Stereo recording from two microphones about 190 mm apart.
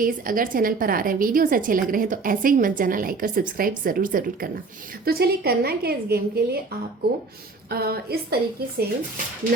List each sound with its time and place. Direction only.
0.0 s a woman's voice: 45° right (ahead or behind)
7.7 s a woman's voice: 55° right (ahead or behind)